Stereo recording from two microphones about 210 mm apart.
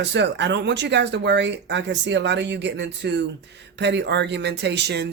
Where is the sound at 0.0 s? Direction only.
55° right (ahead or behind).